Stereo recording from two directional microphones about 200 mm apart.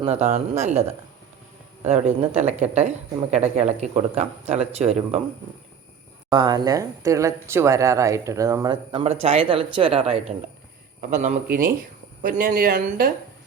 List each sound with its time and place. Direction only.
0.0 s speech: 35° right (ahead or behind)
6.3 s speech: 20° right (ahead or behind); by 13.1 s 45° right (ahead or behind)